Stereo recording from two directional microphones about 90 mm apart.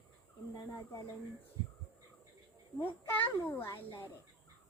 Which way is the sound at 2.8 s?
20° left (ahead or behind).